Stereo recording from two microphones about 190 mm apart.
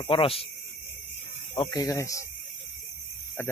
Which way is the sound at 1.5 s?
20° left (ahead or behind).